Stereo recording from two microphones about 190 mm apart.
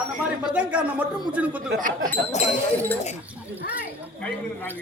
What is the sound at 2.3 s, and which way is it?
Speech, 40° left (ahead or behind).